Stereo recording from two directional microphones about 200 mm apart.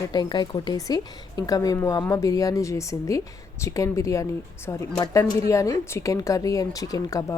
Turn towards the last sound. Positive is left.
turn(degrees=15)  # may be behind; listen again after turning